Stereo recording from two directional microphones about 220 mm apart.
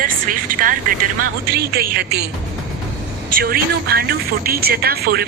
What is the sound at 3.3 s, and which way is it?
A woman's voice, 45° right (ahead or behind).